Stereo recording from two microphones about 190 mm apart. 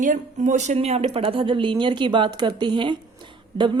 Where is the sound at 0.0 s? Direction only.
40° right (ahead or behind).